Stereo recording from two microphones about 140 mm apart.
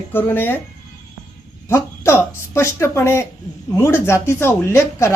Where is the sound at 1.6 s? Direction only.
20° left (ahead or behind).